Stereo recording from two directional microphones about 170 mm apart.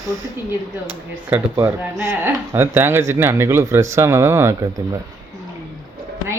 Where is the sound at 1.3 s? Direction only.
15° right (ahead or behind).